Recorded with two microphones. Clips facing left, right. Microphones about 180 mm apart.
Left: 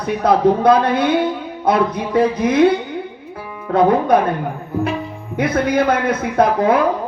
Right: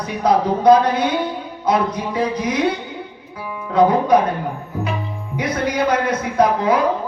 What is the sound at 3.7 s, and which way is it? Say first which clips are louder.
Speech: left 1 dB; 55° left (ahead or behind).